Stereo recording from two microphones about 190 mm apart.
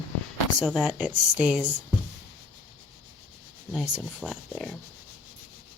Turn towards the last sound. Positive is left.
turn(degrees=0)  # may be behind; listen again after turning